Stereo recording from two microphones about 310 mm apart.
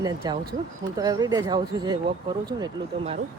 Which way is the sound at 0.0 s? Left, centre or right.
Centre.